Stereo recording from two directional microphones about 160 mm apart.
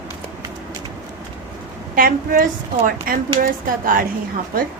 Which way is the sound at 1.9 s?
60° right (ahead or behind).